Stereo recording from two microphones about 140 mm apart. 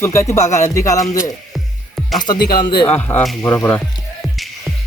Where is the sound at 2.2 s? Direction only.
30° left (ahead or behind).